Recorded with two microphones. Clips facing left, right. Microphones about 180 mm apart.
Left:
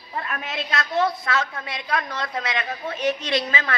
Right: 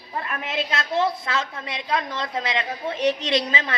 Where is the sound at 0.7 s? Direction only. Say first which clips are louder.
Left 2 dB; 25° right (ahead or behind).